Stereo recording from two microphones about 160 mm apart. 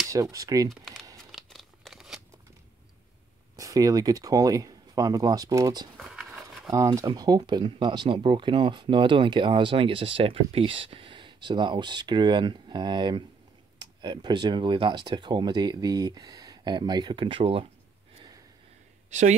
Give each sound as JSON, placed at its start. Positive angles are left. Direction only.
{"t": 0.0, "sound": "speech", "side_deg": -20}
{"t": 0.7, "sound": "speech", "side_deg": 0}
{"t": 1.1, "sound": "scissors", "side_deg": 0}
{"t": 3.5, "sound": "speech", "side_deg": -20}
{"t": 5.9, "sound": "a sound", "side_deg": 0}
{"t": 6.7, "sound": "speech", "side_deg": -20}
{"t": 19.0, "sound": "speech", "side_deg": -45}